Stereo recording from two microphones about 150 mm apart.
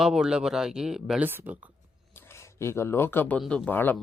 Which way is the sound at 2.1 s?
15° left (ahead or behind).